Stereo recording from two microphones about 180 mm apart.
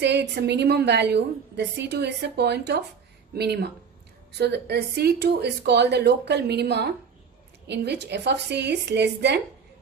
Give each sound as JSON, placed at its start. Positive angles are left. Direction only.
{"t": 0.0, "sound": "a woman's voice", "side_deg": -70}